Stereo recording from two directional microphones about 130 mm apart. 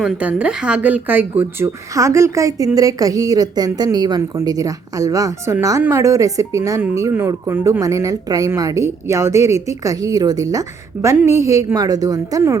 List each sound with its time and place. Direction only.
0.0 s a woman's voice: 10° right (ahead or behind); by 12.5 s 25° right (ahead or behind)